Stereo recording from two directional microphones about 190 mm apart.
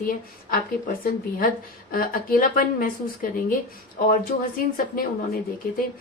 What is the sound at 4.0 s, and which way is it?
Speech, 50° left (ahead or behind).